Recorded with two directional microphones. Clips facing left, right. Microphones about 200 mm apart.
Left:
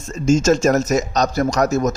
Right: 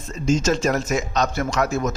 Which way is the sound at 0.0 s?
45° left (ahead or behind).